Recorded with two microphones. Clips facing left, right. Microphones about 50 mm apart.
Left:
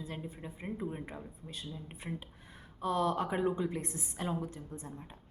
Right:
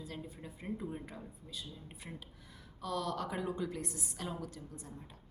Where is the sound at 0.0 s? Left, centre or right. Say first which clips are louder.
Left 3 dB; left.